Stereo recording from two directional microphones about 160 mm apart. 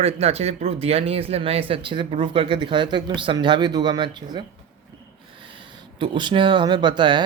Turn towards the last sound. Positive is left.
turn(degrees=-30)  # may be behind; listen again after turning